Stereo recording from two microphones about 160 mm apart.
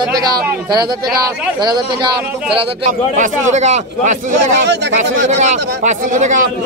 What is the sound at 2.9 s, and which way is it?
A man's voice, 50° right (ahead or behind).